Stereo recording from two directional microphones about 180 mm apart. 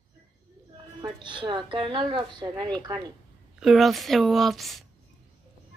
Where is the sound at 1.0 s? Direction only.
25° right (ahead or behind).